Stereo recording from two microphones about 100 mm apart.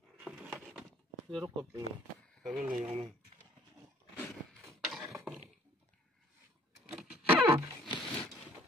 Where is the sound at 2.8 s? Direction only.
90° right.